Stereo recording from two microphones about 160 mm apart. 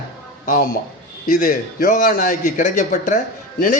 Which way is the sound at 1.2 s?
60° left (ahead or behind).